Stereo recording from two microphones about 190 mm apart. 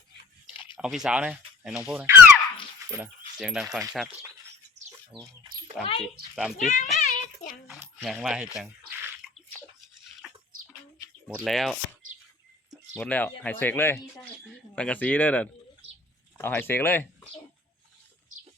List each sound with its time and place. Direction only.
0.8 s speech: 5° right (ahead or behind)
5.8 s speech: 30° left (ahead or behind)
6.6 s a child's voice: 40° left (ahead or behind)
7.0 s a sound: 40° left (ahead or behind)
7.7 s a sound: 5° right (ahead or behind)
11.3 s speech: centre (ahead or behind)
13.0 s speech: 10° left (ahead or behind)